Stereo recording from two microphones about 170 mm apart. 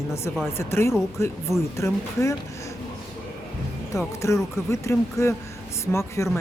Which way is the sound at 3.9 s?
15° left (ahead or behind).